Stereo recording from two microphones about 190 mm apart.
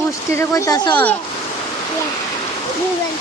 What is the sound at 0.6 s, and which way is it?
Speech, 20° left (ahead or behind).